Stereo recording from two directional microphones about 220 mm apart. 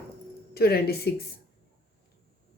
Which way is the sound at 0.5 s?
45° left (ahead or behind).